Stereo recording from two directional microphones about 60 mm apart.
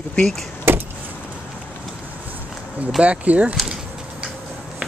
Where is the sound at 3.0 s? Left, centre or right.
Right.